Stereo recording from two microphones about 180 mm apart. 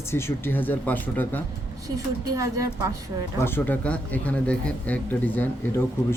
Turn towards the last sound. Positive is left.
turn(degrees=10)  # may be behind; listen again after turning